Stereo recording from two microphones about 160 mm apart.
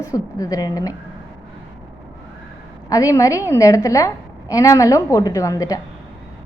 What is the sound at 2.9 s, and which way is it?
A woman's voice, 20° left (ahead or behind).